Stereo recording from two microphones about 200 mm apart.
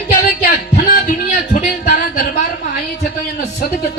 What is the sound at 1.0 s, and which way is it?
Music, 45° left (ahead or behind).